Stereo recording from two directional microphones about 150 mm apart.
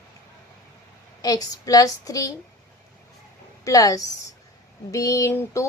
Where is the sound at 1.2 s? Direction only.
25° left (ahead or behind).